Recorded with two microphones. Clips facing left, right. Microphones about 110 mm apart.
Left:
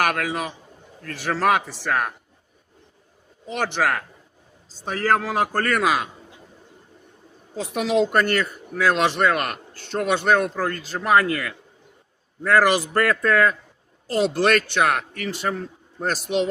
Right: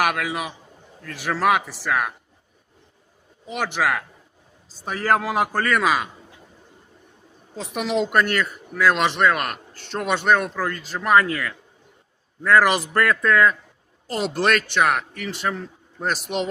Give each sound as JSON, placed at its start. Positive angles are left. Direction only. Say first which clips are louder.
{"t": 0.0, "sound": "a man's voice", "louder": "even", "side_deg": -5}
{"t": 3.5, "sound": "a man's voice", "louder": "even", "side_deg": -5}
{"t": 7.5, "sound": "a man's voice", "louder": "left 3 dB", "side_deg": 0}
{"t": 12.5, "sound": "a man's voice", "louder": "even", "side_deg": 0}